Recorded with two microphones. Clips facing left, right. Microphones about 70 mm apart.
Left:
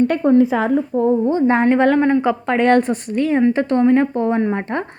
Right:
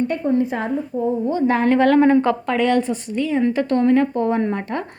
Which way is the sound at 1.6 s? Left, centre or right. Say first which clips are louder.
Right 4 dB; centre.